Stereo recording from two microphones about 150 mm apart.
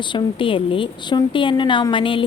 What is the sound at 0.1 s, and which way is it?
A woman's voice, 35° left (ahead or behind).